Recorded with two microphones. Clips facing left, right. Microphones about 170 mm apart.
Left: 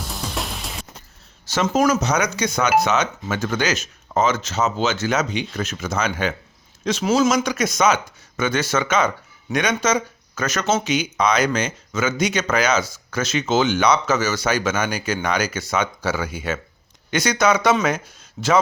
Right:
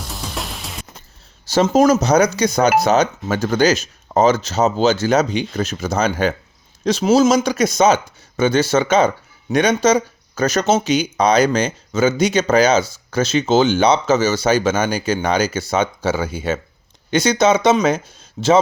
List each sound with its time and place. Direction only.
0.0 s music: centre (ahead or behind)
1.5 s speech: 35° right (ahead or behind)